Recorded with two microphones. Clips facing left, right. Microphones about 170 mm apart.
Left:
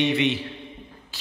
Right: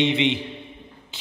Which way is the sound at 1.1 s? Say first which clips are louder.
Right 1 dB; 20° right (ahead or behind).